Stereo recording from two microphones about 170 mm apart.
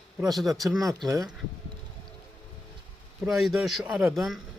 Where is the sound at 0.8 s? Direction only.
20° right (ahead or behind).